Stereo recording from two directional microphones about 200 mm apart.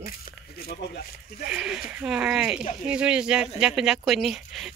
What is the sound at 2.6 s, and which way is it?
Speech, 35° left (ahead or behind).